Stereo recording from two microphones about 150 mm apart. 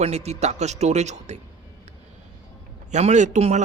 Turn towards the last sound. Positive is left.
turn(degrees=-50)  # may be behind; listen again after turning